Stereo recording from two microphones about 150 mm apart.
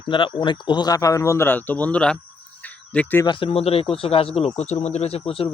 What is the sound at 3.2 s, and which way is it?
A man's voice, 35° left (ahead or behind).